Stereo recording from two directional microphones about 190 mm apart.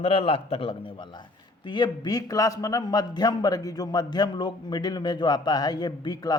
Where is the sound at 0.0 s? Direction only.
30° left (ahead or behind).